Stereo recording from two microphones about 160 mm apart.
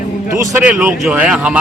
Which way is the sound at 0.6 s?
5° right (ahead or behind).